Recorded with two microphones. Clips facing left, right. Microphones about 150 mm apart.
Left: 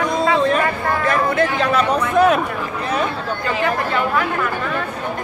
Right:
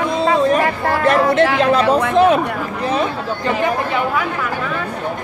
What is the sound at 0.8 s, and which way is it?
Speech, 75° right (ahead or behind).